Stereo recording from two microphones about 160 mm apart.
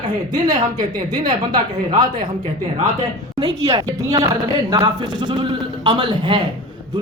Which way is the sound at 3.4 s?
25° right (ahead or behind).